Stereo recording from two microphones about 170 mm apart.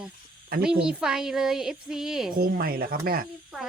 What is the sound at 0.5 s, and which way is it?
Speech, 60° right (ahead or behind).